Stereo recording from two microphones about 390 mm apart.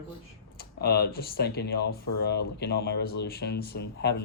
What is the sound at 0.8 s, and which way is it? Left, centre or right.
Speech, left.